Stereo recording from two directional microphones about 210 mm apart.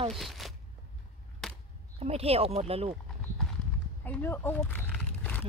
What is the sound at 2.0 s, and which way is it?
Speech, 30° right (ahead or behind).